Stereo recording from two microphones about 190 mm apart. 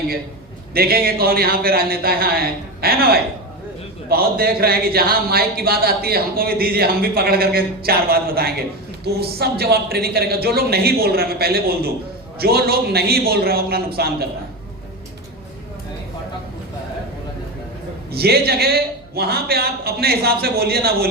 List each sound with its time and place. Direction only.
0.7 s a man's voice: 55° right (ahead or behind)
18.1 s a man's voice: 55° right (ahead or behind)